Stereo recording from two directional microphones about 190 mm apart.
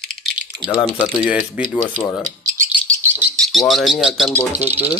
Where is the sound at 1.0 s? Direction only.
5° right (ahead or behind).